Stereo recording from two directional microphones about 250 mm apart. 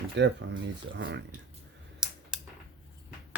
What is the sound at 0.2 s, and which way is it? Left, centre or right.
Speech, right.